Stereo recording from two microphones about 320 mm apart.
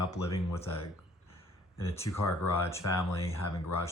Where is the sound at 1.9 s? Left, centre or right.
Centre.